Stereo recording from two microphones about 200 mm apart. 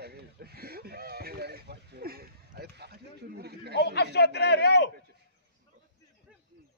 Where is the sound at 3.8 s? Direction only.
55° left (ahead or behind).